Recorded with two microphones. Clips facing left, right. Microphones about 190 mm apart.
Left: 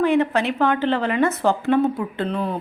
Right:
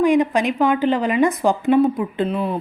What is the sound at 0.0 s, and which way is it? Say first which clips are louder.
Speech: right 2 dB; 15° right (ahead or behind).